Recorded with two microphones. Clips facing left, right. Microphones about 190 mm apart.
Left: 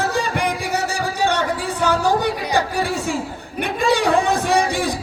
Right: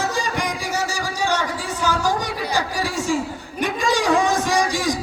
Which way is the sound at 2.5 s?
60° left (ahead or behind).